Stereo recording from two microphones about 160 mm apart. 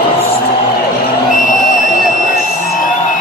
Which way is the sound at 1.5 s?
55° left (ahead or behind).